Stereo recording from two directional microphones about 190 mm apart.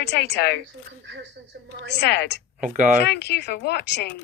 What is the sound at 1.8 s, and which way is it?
Speech, 60° left (ahead or behind).